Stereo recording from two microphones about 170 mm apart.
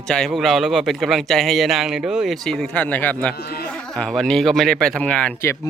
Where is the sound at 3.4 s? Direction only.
65° left (ahead or behind).